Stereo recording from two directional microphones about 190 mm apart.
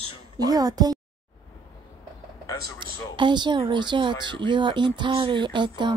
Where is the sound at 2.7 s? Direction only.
25° right (ahead or behind).